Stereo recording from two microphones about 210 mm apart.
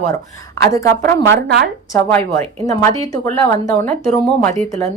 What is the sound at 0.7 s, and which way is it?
Speech, 15° left (ahead or behind).